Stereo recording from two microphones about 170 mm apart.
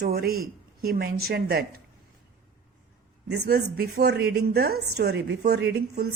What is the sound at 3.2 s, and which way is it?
Speech, 75° right (ahead or behind).